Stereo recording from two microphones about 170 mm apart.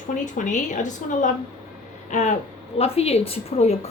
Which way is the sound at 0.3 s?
45° left (ahead or behind).